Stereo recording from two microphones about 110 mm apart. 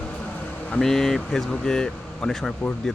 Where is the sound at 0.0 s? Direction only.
15° left (ahead or behind).